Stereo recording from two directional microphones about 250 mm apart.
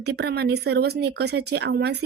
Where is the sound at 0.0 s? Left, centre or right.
Right.